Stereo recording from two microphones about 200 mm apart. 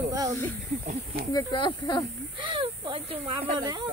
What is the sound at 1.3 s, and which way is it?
Speech, 20° left (ahead or behind).